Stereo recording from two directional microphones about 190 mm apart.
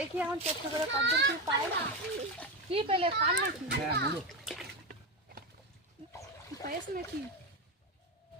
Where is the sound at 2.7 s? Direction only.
30° right (ahead or behind).